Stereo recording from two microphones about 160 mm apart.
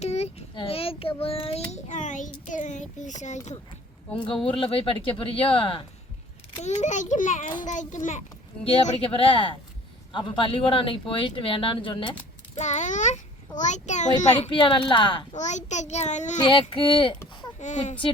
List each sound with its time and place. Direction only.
0.0 s a child's voice: 40° left (ahead or behind)
4.5 s a child's voice: 35° left (ahead or behind)
6.6 s a child's voice: 45° left (ahead or behind)
8.6 s a child's voice: 35° left (ahead or behind)
12.5 s a child's voice: 45° left (ahead or behind)
14.5 s a child's voice: 30° left (ahead or behind)
15.4 s a child's voice: 45° left (ahead or behind)
16.4 s a child's voice: 30° left (ahead or behind)
17.6 s a child's voice: 50° left (ahead or behind)